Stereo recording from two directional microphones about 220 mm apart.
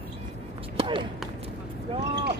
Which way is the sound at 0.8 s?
25° right (ahead or behind).